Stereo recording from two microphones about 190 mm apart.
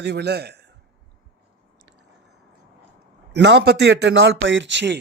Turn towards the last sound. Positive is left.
turn(degrees=-70)  # may be behind; listen again after turning